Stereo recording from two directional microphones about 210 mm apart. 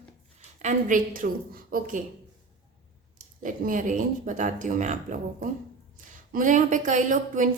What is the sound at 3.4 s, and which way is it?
Speech, 40° right (ahead or behind).